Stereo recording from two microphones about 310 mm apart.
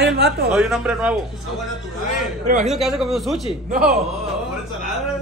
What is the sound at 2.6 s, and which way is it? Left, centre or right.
Speech, centre.